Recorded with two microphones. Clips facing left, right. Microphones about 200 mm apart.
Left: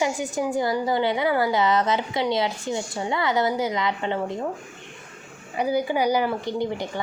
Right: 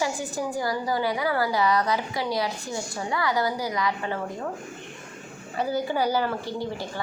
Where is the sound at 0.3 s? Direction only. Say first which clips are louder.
Left 5 dB; 20° left (ahead or behind).